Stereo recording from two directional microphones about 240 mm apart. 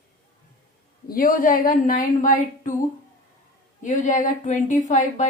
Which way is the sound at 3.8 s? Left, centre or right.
Left.